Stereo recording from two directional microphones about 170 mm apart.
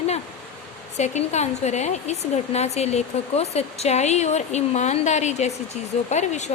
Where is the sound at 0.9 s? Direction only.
40° left (ahead or behind).